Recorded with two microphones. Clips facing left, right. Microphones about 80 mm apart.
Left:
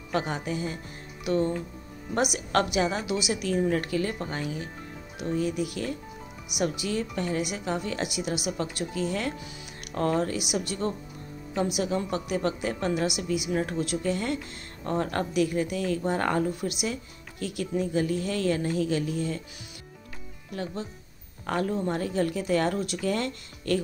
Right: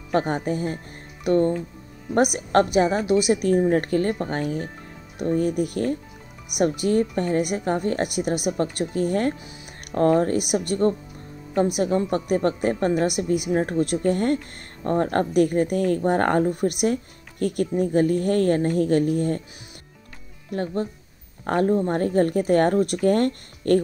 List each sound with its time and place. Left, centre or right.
0.1 s a woman's voice: right
20.5 s a woman's voice: right